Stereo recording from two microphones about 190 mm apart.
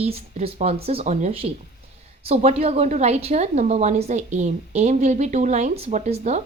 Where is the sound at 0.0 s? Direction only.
30° right (ahead or behind).